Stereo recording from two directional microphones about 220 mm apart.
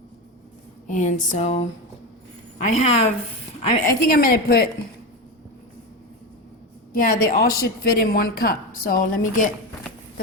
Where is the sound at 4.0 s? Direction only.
40° left (ahead or behind).